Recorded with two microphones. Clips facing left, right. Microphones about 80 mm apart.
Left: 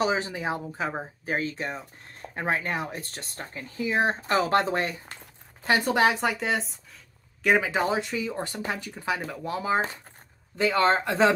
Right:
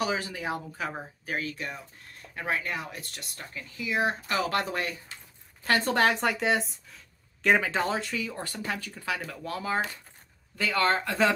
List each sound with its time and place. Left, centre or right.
0.0 s speech: left
5.7 s speech: centre